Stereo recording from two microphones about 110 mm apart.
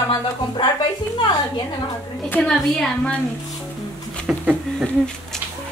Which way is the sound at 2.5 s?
5° left (ahead or behind).